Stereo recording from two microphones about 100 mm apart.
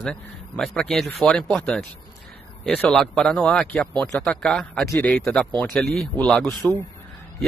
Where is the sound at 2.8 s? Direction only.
5° left (ahead or behind).